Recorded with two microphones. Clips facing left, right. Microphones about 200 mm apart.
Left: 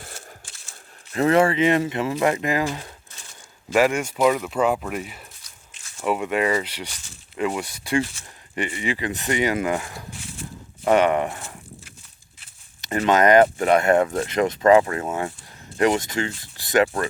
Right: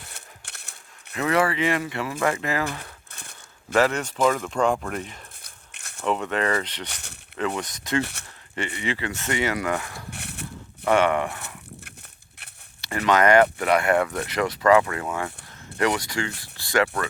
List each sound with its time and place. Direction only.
0.1 s crushing: 65° right (ahead or behind)
1.1 s speech: 30° left (ahead or behind)
3.1 s a sound: 60° right (ahead or behind)
3.7 s speech: 10° left (ahead or behind)
5.4 s a sound: 65° right (ahead or behind)
6.1 s speech: 10° left (ahead or behind)
6.8 s speech: 65° right (ahead or behind)
7.3 s speech: 10° left (ahead or behind)
10.1 s a sound: 65° right (ahead or behind)
10.8 s speech: 20° left (ahead or behind)
12.8 s speech: 20° left (ahead or behind)